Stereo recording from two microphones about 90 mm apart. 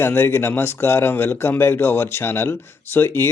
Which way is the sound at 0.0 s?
25° left (ahead or behind).